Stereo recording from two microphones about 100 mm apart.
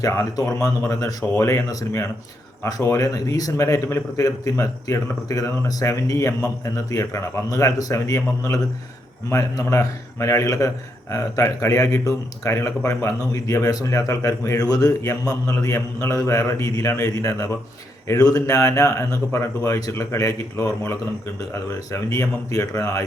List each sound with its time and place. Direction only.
0.0 s a man's voice: 30° left (ahead or behind)